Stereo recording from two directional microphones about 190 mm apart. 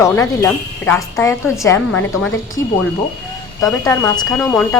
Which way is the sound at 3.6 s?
15° left (ahead or behind).